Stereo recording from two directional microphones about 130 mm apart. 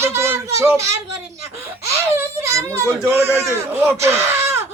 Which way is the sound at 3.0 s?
20° right (ahead or behind).